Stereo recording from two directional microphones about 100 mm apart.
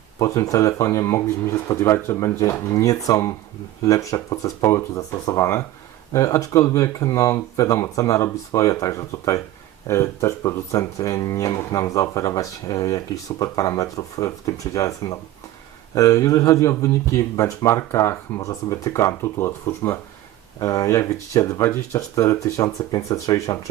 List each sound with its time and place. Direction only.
0.2 s speech: 35° left (ahead or behind)